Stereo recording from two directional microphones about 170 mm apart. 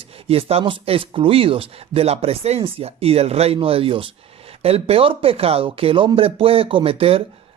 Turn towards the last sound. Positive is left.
turn(degrees=-35)  # may be behind; listen again after turning